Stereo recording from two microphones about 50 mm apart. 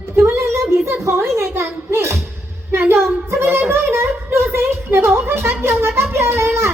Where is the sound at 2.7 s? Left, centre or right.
Right.